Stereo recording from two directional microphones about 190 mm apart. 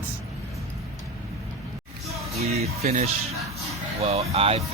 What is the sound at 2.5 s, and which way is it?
Speech, 35° right (ahead or behind).